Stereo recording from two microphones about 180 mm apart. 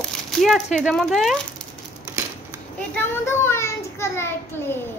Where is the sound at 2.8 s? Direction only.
10° left (ahead or behind).